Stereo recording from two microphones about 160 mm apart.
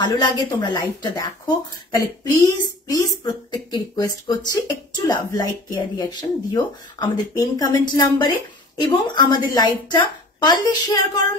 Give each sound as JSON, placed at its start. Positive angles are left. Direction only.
{"t": 0.0, "sound": "speech", "side_deg": 25}